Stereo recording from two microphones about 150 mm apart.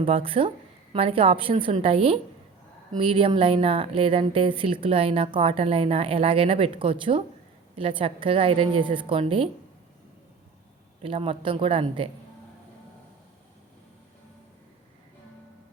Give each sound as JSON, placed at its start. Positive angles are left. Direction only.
{"t": 0.0, "sound": "speech", "side_deg": -35}
{"t": 11.0, "sound": "speech", "side_deg": -40}